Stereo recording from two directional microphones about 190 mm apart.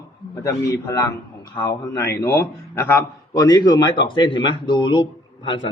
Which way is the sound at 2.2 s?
10° left (ahead or behind).